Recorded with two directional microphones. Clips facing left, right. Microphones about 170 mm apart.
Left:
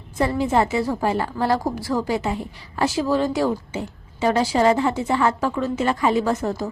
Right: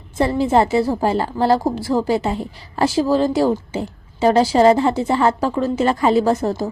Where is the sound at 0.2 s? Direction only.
30° right (ahead or behind).